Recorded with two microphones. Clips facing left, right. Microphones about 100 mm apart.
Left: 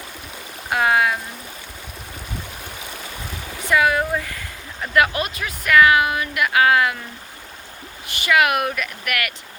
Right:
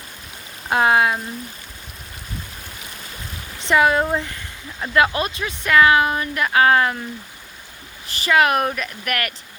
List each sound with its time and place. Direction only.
0.7 s speech: 25° right (ahead or behind)
3.6 s speech: 25° right (ahead or behind)
8.0 s speech: 35° right (ahead or behind)